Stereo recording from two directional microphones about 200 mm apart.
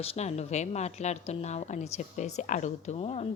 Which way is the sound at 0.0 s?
30° left (ahead or behind).